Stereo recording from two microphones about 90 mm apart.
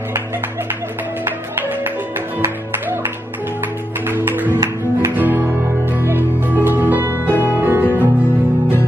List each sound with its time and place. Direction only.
2.4 s music: 25° right (ahead or behind)
4.1 s music: 25° right (ahead or behind)